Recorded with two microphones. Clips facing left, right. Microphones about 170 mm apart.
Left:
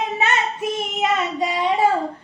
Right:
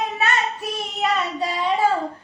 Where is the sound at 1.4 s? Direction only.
20° left (ahead or behind).